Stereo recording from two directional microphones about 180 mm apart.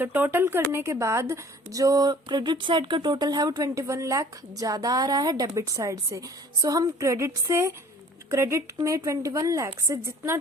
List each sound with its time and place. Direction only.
0.0 s a woman's voice: 10° right (ahead or behind)